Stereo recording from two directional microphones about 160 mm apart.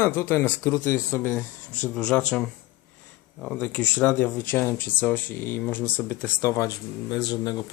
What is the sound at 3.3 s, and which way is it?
Speech, 10° left (ahead or behind).